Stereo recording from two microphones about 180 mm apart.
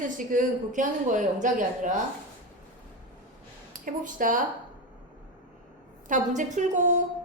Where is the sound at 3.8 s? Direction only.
45° right (ahead or behind).